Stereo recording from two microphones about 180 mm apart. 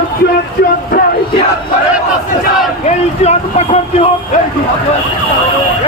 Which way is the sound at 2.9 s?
35° left (ahead or behind).